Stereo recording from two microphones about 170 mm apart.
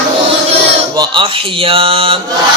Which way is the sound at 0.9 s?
30° right (ahead or behind).